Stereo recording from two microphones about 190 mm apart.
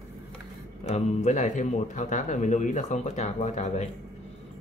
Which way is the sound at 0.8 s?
35° left (ahead or behind).